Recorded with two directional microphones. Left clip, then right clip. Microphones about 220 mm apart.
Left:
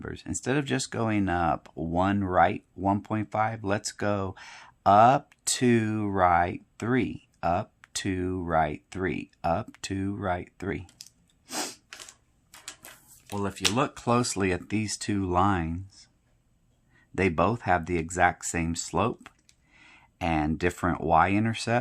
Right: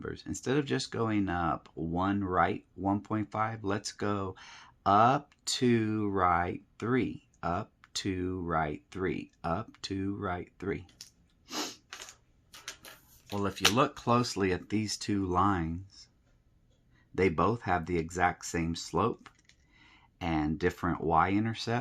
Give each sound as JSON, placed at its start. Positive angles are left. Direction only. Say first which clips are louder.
{"t": 0.0, "sound": "speech", "louder": "left 3 dB", "side_deg": 30}
{"t": 11.4, "sound": "a sound", "louder": "left 3 dB", "side_deg": 25}
{"t": 13.3, "sound": "speech", "louder": "even", "side_deg": 15}
{"t": 17.2, "sound": "speech", "louder": "left 3 dB", "side_deg": 30}